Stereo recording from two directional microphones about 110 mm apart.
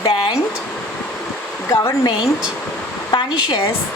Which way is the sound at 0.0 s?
45° left (ahead or behind).